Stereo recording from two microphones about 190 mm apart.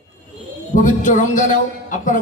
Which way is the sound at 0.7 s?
40° left (ahead or behind).